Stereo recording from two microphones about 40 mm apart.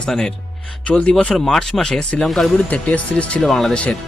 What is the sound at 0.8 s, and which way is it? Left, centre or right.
Speech, left.